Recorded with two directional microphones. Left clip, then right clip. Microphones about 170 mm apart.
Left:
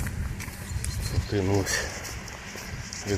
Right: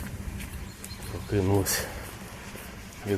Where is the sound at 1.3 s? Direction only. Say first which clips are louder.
Even; 15° right (ahead or behind).